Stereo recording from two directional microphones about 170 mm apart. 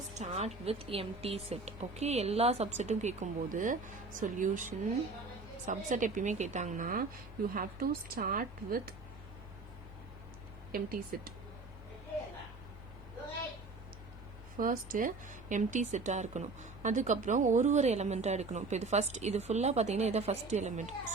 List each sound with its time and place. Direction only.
0.1 s a woman's voice: 40° right (ahead or behind); by 9.0 s 60° right (ahead or behind)
10.7 s a woman's voice: 60° right (ahead or behind)
14.6 s speech: 50° right (ahead or behind)